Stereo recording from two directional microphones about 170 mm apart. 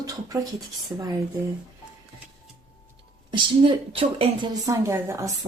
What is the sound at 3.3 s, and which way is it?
Speech, 30° right (ahead or behind).